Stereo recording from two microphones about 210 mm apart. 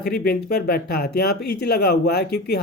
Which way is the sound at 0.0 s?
50° left (ahead or behind).